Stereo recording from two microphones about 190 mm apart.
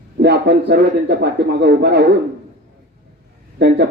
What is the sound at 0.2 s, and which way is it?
A man's voice, 65° right (ahead or behind).